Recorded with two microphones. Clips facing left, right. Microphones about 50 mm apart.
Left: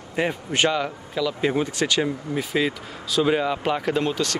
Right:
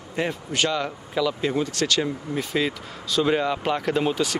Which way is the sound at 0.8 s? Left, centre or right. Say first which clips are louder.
Even; centre.